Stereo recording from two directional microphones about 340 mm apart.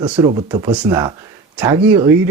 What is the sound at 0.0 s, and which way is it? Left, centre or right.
Speech, centre.